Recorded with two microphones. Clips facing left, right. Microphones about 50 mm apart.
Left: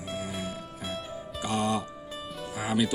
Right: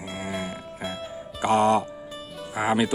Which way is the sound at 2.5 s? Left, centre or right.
Right.